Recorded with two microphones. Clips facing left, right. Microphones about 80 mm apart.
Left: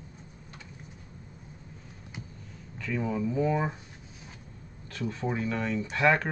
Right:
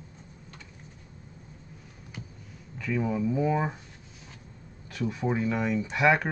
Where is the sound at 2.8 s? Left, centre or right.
Centre.